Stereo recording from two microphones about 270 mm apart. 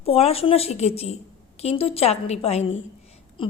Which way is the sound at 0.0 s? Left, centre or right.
Left.